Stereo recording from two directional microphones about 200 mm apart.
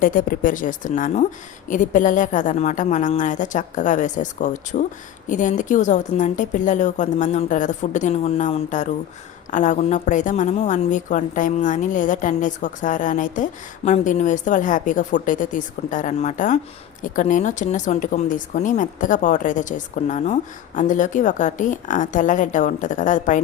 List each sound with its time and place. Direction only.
0.0 s a woman's voice: 45° left (ahead or behind)